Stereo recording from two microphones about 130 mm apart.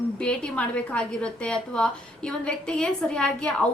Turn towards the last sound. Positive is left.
turn(degrees=5)  # may be behind; listen again after turning